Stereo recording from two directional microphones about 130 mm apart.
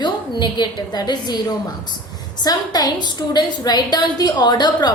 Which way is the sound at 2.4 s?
30° left (ahead or behind).